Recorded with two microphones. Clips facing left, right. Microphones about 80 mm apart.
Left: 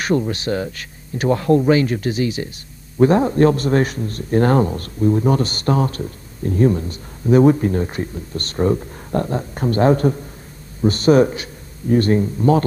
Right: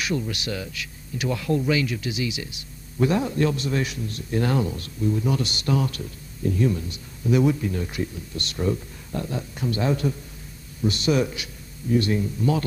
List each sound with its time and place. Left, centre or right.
0.0 s a man's voice: left